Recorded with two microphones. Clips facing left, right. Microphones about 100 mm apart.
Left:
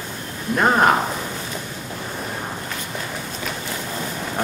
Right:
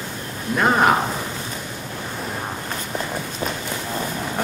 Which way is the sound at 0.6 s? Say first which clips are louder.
Left 1 dB; centre (ahead or behind).